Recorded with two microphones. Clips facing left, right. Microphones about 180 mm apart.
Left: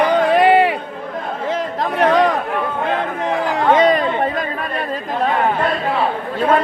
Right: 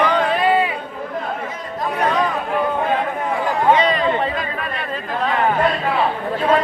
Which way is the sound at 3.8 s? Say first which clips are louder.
Left 3 dB; 45° left (ahead or behind).